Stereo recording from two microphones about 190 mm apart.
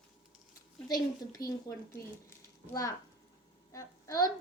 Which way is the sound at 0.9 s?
20° left (ahead or behind).